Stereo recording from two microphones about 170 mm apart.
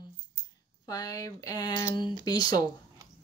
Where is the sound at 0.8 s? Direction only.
20° left (ahead or behind).